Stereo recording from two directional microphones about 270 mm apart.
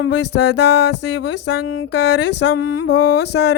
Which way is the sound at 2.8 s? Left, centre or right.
Left.